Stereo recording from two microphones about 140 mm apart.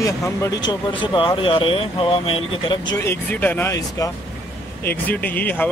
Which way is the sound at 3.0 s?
15° left (ahead or behind).